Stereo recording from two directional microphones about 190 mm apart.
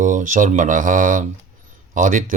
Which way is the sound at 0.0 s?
45° right (ahead or behind).